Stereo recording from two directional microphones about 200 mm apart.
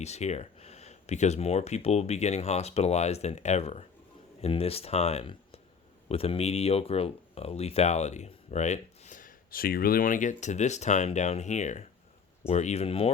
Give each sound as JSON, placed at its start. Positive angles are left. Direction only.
{"t": 0.0, "sound": "speech", "side_deg": 35}